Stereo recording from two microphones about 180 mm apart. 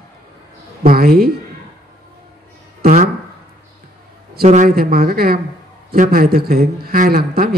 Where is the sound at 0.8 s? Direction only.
55° right (ahead or behind).